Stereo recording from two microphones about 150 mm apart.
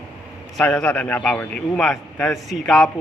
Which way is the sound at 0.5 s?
5° left (ahead or behind).